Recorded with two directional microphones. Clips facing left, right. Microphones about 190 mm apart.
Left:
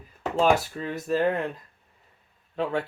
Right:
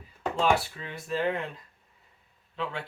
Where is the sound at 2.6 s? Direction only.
45° left (ahead or behind).